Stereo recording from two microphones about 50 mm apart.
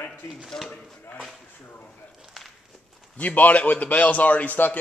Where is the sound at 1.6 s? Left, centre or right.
Left.